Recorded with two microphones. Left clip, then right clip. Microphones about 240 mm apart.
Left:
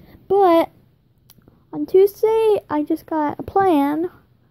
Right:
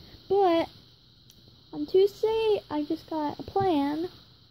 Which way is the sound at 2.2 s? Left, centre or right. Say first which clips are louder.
Left 9 dB; left.